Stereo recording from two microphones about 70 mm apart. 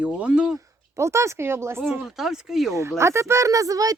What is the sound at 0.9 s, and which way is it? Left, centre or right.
Speech, right.